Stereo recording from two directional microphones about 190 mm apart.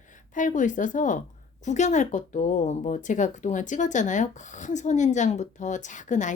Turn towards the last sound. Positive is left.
turn(degrees=40)  # may be behind; listen again after turning